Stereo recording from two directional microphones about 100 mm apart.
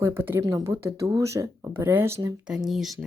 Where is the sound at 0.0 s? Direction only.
25° right (ahead or behind).